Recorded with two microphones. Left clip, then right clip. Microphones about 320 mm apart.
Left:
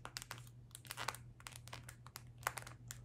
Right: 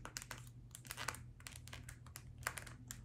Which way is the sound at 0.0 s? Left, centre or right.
Centre.